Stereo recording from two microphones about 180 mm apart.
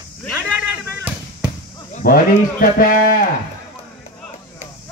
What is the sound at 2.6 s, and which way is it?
Speech, 50° left (ahead or behind).